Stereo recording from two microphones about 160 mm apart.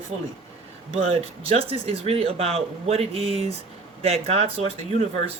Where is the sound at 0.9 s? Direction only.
40° right (ahead or behind).